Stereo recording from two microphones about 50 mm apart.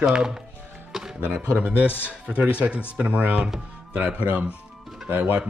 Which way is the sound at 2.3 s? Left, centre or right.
Right.